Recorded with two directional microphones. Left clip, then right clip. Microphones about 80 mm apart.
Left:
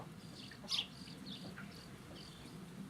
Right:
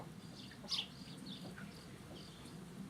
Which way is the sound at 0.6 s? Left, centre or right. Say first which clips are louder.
Left 2 dB; left.